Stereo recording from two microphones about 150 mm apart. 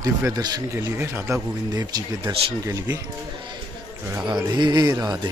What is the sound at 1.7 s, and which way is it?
Speech, 25° right (ahead or behind).